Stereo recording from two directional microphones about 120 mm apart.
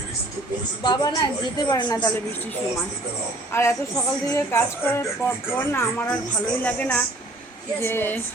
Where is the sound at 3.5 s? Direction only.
25° left (ahead or behind).